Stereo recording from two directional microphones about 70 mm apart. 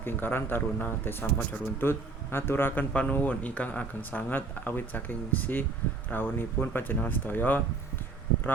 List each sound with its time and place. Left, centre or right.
0.0 s speech: left
2.9 s speech: centre